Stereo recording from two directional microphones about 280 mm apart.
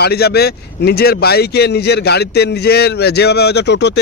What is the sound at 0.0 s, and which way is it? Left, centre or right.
Speech, left.